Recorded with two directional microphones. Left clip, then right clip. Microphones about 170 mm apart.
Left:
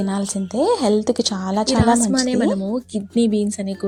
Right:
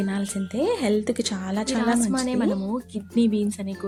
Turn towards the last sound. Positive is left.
turn(degrees=25)  # may be behind; listen again after turning